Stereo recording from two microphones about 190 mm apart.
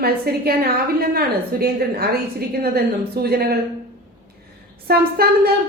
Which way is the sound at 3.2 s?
55° right (ahead or behind).